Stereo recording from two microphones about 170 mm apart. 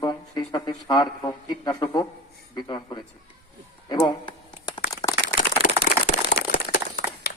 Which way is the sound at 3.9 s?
25° left (ahead or behind).